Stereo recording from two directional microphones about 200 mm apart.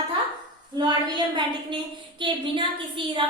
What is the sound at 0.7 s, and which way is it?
A woman's voice, 20° right (ahead or behind).